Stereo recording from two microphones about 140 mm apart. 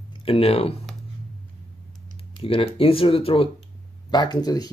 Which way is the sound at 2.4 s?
40° left (ahead or behind).